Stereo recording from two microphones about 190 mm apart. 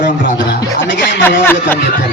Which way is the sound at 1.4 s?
10° left (ahead or behind).